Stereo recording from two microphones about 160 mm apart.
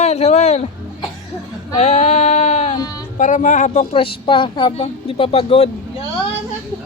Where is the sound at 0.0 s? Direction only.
45° left (ahead or behind).